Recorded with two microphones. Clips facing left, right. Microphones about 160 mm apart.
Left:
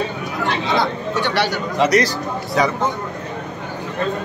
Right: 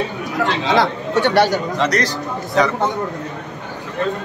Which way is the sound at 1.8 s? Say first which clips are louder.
Left 3 dB; 10° left (ahead or behind).